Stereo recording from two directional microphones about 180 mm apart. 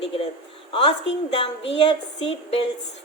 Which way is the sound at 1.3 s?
35° left (ahead or behind).